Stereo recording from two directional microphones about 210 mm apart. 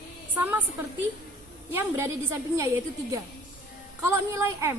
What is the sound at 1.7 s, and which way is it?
Speech, 10° right (ahead or behind).